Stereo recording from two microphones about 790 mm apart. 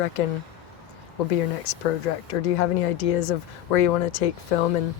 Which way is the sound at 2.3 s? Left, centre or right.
Left.